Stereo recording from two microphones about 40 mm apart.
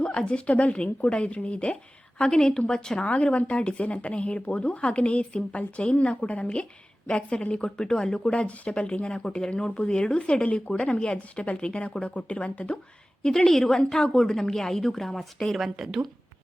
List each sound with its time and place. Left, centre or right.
0.0 s speech: left
8.3 s speech: left
13.2 s a woman's voice: centre